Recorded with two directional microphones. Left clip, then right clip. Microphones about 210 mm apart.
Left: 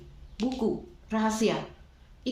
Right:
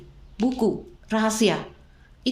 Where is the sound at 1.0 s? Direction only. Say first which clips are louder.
Right 5 dB; 45° right (ahead or behind).